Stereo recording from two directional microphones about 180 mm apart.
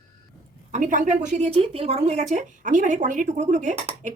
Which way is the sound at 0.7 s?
45° right (ahead or behind).